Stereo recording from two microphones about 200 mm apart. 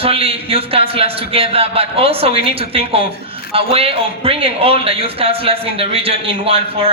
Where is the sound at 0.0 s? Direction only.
30° right (ahead or behind).